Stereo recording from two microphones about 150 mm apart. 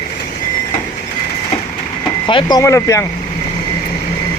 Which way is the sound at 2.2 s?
30° left (ahead or behind).